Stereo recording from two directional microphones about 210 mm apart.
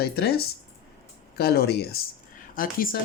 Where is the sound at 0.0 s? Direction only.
50° left (ahead or behind).